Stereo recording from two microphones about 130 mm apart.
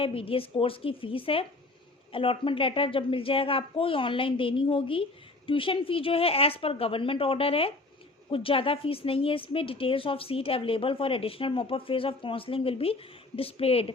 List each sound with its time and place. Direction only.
0.0 s a woman's voice: 45° left (ahead or behind)